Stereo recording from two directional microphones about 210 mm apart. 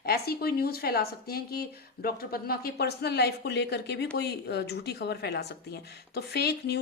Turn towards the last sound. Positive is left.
turn(degrees=50)  # may be behind; listen again after turning